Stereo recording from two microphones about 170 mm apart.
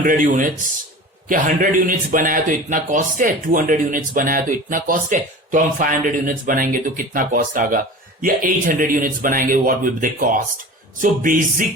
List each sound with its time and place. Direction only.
0.0 s a man's voice: 50° right (ahead or behind)